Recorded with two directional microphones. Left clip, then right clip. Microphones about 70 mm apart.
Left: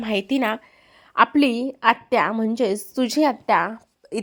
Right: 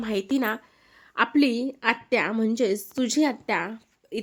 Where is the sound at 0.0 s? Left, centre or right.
Left; by 2.3 s centre.